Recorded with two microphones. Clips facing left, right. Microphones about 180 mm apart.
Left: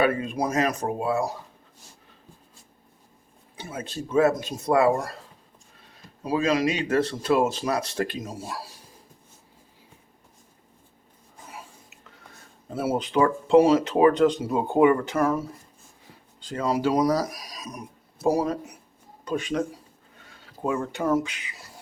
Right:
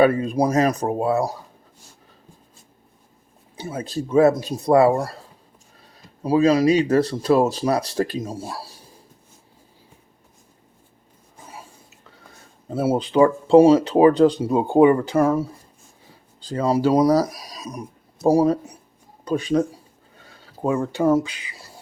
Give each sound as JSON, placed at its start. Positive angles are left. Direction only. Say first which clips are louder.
{"t": 0.0, "sound": "speech", "louder": "right 6 dB", "side_deg": -40}
{"t": 3.6, "sound": "speech", "louder": "right 6 dB", "side_deg": -35}
{"t": 12.7, "sound": "speech", "louder": "right 5 dB", "side_deg": -25}